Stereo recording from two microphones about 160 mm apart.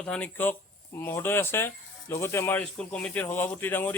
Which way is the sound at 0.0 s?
10° left (ahead or behind).